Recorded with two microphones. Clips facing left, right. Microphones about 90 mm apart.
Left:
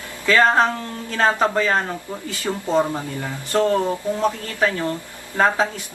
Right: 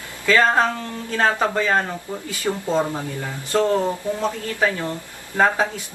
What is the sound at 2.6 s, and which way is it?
Speech, 15° left (ahead or behind).